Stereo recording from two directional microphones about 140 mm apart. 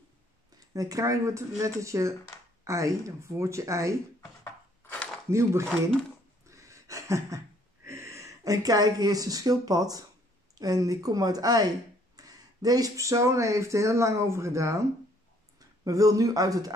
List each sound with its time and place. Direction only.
0.7 s speech: 25° right (ahead or behind)
4.8 s cutlery: 10° left (ahead or behind)
5.3 s speech: 20° right (ahead or behind)
6.4 s a sound: 20° right (ahead or behind)
10.5 s speech: 25° right (ahead or behind)